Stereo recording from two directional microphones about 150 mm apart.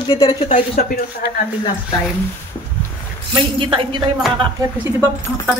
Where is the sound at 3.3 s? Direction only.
35° right (ahead or behind).